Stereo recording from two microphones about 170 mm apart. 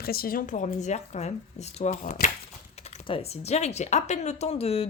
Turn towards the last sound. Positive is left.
turn(degrees=35)  # may be behind; listen again after turning